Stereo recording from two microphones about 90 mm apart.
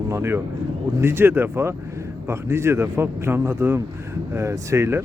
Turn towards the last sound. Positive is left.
turn(degrees=-30)  # may be behind; listen again after turning